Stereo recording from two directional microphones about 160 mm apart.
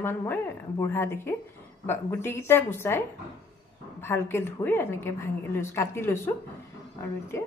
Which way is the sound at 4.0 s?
15° left (ahead or behind).